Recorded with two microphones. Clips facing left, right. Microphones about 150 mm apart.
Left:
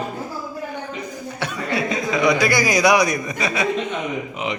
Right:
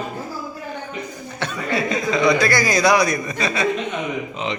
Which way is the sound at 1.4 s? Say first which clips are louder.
Right 1 dB; 10° left (ahead or behind).